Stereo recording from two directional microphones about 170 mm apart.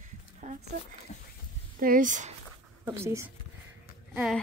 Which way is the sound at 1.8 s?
50° right (ahead or behind).